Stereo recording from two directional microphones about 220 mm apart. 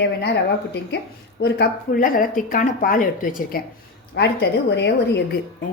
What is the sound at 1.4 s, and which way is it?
A woman's voice, 45° left (ahead or behind).